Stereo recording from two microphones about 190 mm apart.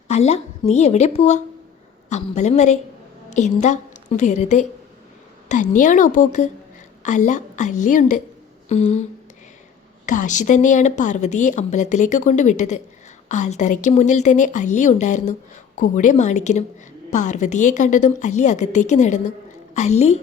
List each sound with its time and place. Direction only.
0.1 s a woman's voice: 35° left (ahead or behind)
10.1 s speech: 40° left (ahead or behind)